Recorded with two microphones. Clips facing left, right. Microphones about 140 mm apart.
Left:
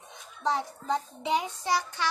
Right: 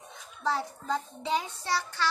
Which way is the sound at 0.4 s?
20° left (ahead or behind).